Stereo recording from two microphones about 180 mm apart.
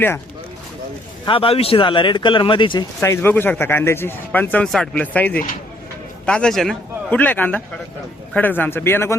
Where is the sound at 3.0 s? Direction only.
15° left (ahead or behind).